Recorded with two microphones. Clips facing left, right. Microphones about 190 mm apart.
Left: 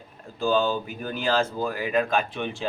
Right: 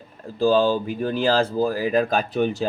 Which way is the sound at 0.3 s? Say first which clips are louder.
Right 5 dB; 35° right (ahead or behind).